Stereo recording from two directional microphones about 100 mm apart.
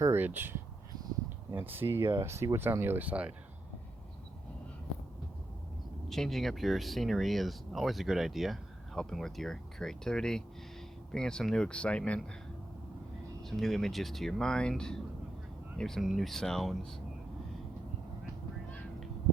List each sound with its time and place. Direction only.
0.0 s speech: 25° right (ahead or behind)
6.1 s speech: 5° left (ahead or behind)
13.4 s speech: 5° left (ahead or behind)